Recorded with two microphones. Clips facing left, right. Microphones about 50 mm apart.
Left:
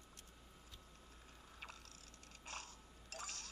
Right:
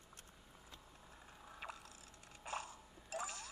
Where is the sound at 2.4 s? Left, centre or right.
Centre.